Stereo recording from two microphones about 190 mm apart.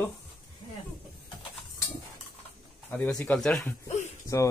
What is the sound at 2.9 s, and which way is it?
Speech, 5° left (ahead or behind).